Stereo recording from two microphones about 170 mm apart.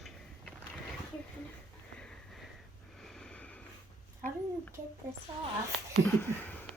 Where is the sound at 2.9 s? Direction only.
5° left (ahead or behind).